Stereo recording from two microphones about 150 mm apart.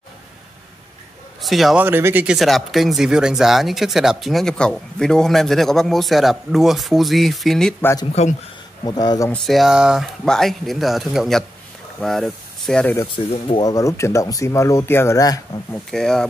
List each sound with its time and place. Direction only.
1.4 s speech: centre (ahead or behind)
1.8 s speech: 15° right (ahead or behind); by 7.7 s centre (ahead or behind)
8.1 s speech: 45° left (ahead or behind)
8.8 s speech: 25° left (ahead or behind)
9.3 s speech: centre (ahead or behind)
13.0 s speech: 35° left (ahead or behind)
15.9 s speech: 5° left (ahead or behind)